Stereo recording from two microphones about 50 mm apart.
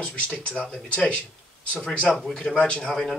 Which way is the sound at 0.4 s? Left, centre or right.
Left.